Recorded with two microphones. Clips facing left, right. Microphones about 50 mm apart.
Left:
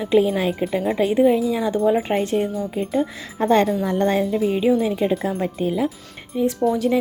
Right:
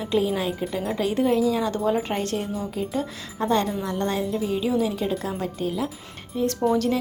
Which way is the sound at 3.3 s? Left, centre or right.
Left.